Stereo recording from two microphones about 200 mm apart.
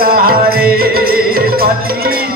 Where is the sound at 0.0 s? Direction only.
50° right (ahead or behind).